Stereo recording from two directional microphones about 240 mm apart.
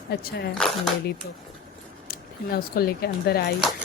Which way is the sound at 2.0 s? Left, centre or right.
Left.